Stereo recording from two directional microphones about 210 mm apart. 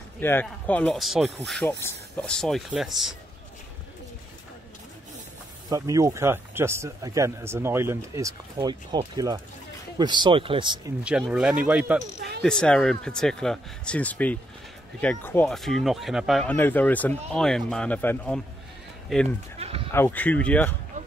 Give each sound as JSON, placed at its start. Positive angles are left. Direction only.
{"t": 0.2, "sound": "speech", "side_deg": 10}
{"t": 5.7, "sound": "a man's voice", "side_deg": -15}
{"t": 11.1, "sound": "a man's voice", "side_deg": -5}
{"t": 12.4, "sound": "speech", "side_deg": 5}
{"t": 19.6, "sound": "a sound", "side_deg": -30}
{"t": 19.9, "sound": "speech", "side_deg": 10}